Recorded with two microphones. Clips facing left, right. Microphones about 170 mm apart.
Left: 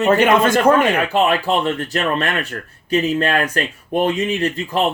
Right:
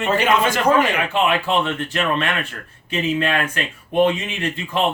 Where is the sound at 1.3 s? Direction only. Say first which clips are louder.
Left 2 dB; 35° left (ahead or behind).